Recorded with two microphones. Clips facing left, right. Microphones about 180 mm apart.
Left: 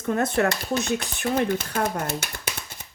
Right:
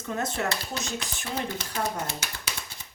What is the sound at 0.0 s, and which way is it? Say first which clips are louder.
Speech: left 7 dB; 55° left (ahead or behind).